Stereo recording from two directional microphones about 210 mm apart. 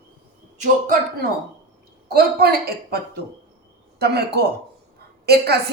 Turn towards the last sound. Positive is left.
turn(degrees=-50)  # may be behind; listen again after turning